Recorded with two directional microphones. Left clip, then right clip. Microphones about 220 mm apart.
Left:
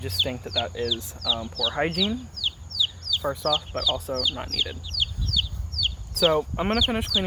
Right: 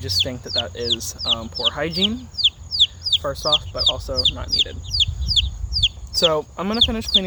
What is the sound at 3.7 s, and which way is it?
Speech, centre (ahead or behind).